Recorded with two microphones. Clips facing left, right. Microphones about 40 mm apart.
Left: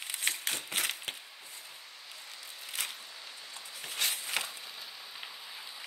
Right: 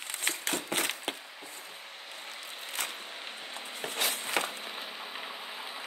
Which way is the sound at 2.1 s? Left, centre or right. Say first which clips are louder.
Right 5 dB; right.